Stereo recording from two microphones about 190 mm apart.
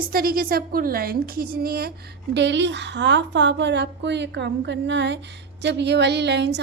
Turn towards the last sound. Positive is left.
turn(degrees=-60)  # may be behind; listen again after turning